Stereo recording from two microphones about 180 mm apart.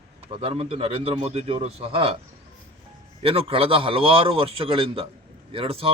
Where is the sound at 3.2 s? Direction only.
30° right (ahead or behind).